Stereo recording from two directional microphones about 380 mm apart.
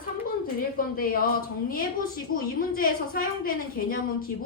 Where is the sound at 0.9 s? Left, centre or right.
Left.